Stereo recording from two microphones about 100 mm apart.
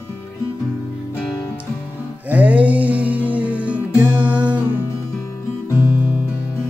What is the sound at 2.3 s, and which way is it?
Music, 15° right (ahead or behind).